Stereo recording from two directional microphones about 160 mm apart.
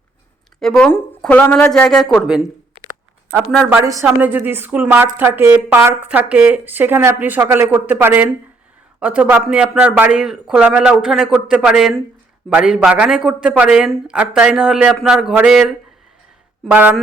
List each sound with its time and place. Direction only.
0.6 s a man's voice: 5° left (ahead or behind)
3.7 s a woman's voice: 20° right (ahead or behind)